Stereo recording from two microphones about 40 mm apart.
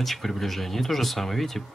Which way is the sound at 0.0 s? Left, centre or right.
Centre.